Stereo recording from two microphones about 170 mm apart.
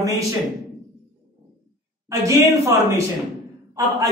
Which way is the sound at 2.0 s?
20° right (ahead or behind).